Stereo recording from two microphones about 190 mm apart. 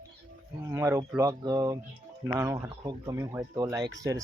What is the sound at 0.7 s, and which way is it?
Speech, 15° right (ahead or behind).